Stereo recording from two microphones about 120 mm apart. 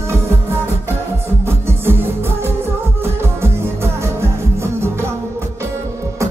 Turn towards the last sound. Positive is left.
turn(degrees=-20)  # may be behind; listen again after turning